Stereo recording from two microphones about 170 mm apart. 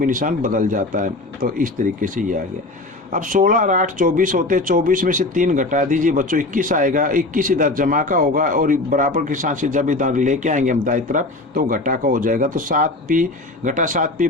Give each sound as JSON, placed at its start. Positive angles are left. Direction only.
{"t": 0.0, "sound": "speech", "side_deg": -50}